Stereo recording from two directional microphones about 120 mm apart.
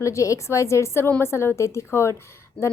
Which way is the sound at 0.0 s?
25° left (ahead or behind).